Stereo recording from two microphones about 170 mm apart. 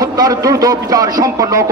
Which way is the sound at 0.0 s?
20° right (ahead or behind).